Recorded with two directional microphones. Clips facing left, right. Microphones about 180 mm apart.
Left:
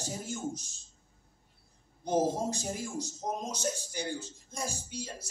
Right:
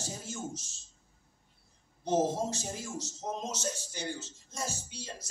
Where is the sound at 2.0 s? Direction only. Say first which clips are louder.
Even; 15° left (ahead or behind).